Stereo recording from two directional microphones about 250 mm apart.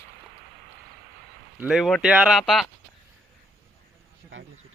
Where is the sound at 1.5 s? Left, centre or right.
Centre.